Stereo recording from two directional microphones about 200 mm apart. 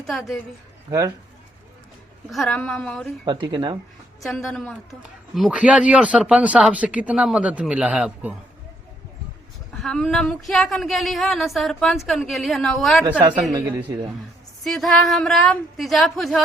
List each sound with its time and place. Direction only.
0.0 s speech: centre (ahead or behind)
0.9 s speech: 15° right (ahead or behind)
2.3 s speech: centre (ahead or behind)
3.2 s a man's voice: 20° right (ahead or behind)
4.2 s speech: centre (ahead or behind)
9.7 s speech: centre (ahead or behind)
13.5 s a man's voice: 20° right (ahead or behind)
14.6 s speech: centre (ahead or behind)